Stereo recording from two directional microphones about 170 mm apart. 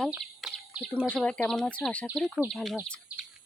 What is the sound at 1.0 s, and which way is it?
Speech, 5° right (ahead or behind).